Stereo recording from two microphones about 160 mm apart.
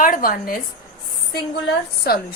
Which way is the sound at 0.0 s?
60° left (ahead or behind).